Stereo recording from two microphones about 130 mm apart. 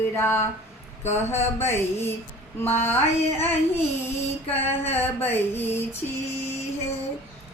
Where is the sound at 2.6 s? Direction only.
15° left (ahead or behind).